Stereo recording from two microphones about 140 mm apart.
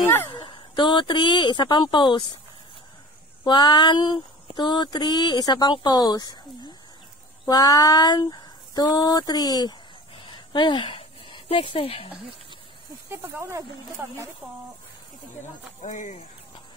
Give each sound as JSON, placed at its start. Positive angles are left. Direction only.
{"t": 0.5, "sound": "speech", "side_deg": 35}
{"t": 3.4, "sound": "speech", "side_deg": 30}
{"t": 13.1, "sound": "speech", "side_deg": -20}
{"t": 15.8, "sound": "speech", "side_deg": 60}